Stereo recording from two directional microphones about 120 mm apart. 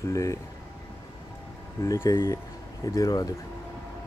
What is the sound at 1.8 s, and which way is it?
Speech, 25° left (ahead or behind).